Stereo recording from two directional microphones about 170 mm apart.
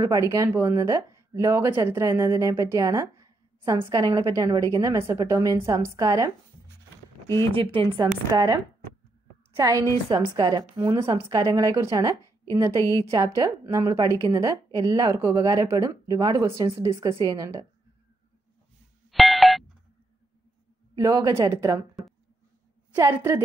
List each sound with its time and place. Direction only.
0.0 s speech: 20° right (ahead or behind)
7.7 s a woman's voice: 30° right (ahead or behind)
19.0 s ding: centre (ahead or behind)
20.9 s speech: 20° right (ahead or behind)
22.9 s a woman's voice: 15° right (ahead or behind)